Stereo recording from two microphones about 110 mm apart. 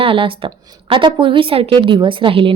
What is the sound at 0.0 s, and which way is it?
Speech, 55° right (ahead or behind).